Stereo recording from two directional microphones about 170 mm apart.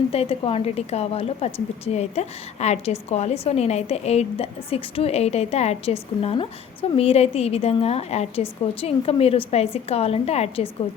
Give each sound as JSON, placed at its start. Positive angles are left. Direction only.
{"t": 0.1, "sound": "a woman's voice", "side_deg": 35}